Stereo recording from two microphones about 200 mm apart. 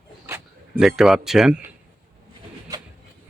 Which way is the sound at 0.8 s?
Centre (ahead or behind).